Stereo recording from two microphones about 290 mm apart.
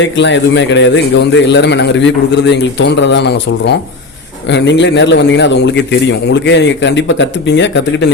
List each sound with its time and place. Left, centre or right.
0.0 s a man's voice: left